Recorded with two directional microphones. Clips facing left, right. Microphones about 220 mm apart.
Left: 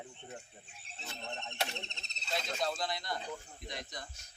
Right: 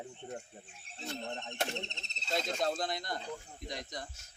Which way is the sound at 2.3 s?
50° right (ahead or behind).